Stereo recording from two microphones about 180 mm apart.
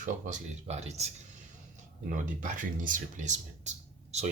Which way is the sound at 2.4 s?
45° right (ahead or behind).